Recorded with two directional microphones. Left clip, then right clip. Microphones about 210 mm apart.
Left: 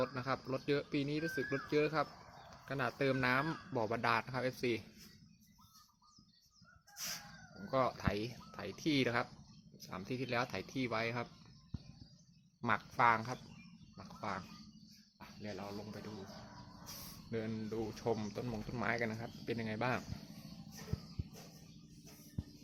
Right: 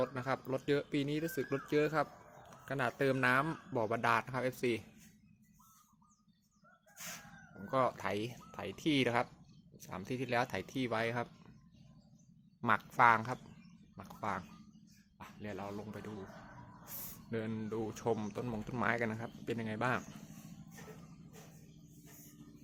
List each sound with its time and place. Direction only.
0.0 s speech: 10° right (ahead or behind)
7.7 s speech: 5° right (ahead or behind)
12.6 s speech: 15° right (ahead or behind)
13.9 s a sound: 15° right (ahead or behind)
15.2 s speech: 15° right (ahead or behind)